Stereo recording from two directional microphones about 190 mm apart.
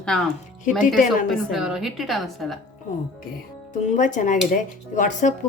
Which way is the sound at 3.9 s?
40° left (ahead or behind).